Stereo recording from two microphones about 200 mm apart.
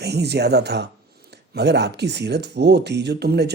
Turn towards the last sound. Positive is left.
turn(degrees=-55)  # may be behind; listen again after turning